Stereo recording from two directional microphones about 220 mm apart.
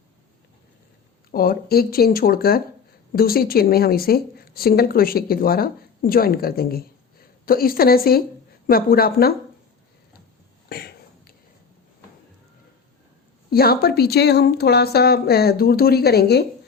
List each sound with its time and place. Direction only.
1.3 s speech: 40° left (ahead or behind)
10.7 s a sound: 45° left (ahead or behind)
13.5 s speech: 45° left (ahead or behind)